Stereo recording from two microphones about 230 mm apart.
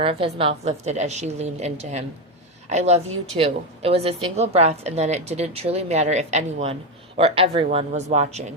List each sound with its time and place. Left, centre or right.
0.0 s a woman's voice: right